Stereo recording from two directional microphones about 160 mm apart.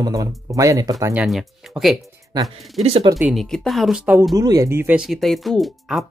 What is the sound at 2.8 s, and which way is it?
Speech, 40° right (ahead or behind).